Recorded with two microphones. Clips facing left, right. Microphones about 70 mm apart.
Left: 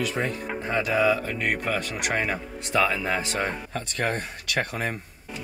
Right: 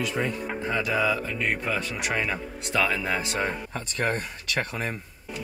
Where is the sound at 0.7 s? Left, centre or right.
Left.